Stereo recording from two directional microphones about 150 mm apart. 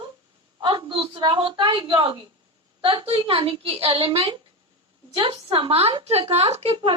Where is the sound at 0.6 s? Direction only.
30° right (ahead or behind).